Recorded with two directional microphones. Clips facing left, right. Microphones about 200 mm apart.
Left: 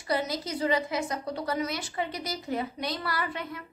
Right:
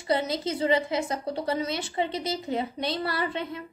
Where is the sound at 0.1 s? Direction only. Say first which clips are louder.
Right 3 dB; 25° right (ahead or behind).